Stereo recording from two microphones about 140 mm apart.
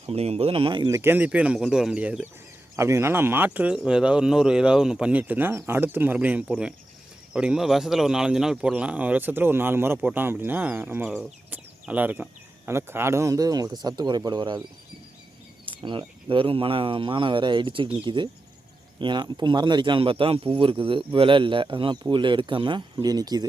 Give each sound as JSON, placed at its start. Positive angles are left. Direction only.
{"t": 0.0, "sound": "speech", "side_deg": -45}
{"t": 0.9, "sound": "speech", "side_deg": -20}
{"t": 15.6, "sound": "speech", "side_deg": -35}